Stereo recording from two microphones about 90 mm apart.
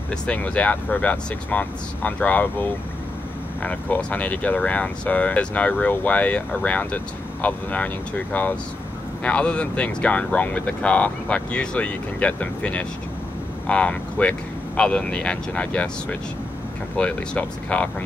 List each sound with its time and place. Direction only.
0.1 s speech: 15° left (ahead or behind)